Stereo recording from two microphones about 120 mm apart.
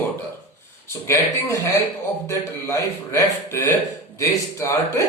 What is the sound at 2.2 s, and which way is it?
A man's voice, 25° left (ahead or behind).